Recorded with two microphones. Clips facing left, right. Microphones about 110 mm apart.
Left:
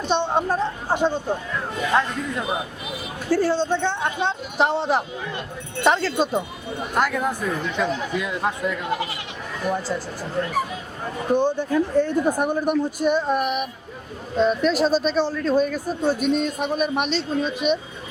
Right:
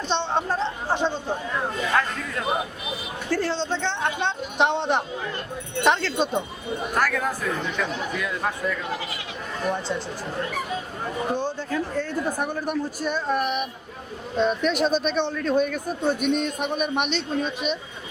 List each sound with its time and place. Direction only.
0.1 s a man's voice: 10° left (ahead or behind)
6.9 s speech: 20° left (ahead or behind)
9.6 s a man's voice: 5° left (ahead or behind)
11.3 s a man's voice: 15° left (ahead or behind); by 17.5 s centre (ahead or behind)